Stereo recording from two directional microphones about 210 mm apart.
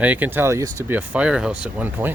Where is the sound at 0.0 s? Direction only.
10° right (ahead or behind).